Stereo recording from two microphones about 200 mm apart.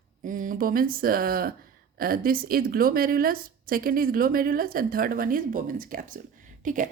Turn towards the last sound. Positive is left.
turn(degrees=-40)  # may be behind; listen again after turning